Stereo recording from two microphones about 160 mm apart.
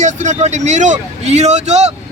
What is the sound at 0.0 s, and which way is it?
A man's voice, 45° right (ahead or behind).